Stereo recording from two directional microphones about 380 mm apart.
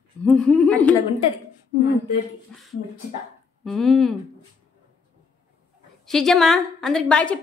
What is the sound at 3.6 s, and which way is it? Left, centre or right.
Speech, centre.